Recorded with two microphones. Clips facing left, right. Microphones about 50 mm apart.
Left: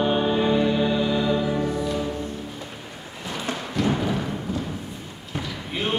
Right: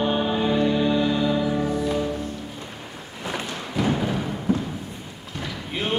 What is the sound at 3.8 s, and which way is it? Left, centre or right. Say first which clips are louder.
Music: even; centre.